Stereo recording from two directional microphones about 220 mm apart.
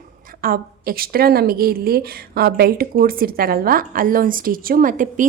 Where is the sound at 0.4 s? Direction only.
40° right (ahead or behind).